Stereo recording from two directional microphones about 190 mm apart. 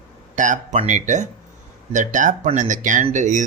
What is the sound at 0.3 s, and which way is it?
Speech, 40° right (ahead or behind).